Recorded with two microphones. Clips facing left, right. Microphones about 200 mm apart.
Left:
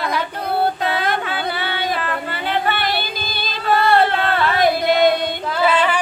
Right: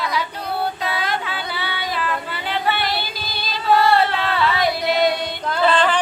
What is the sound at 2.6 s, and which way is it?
Music, 50° left (ahead or behind).